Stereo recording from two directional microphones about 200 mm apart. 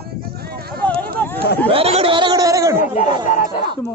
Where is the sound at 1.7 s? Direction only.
30° right (ahead or behind).